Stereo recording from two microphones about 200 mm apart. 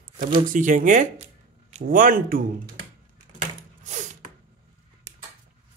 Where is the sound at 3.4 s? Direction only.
35° right (ahead or behind).